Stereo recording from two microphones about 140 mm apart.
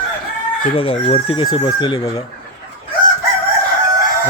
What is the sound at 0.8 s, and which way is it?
Speech, 40° left (ahead or behind).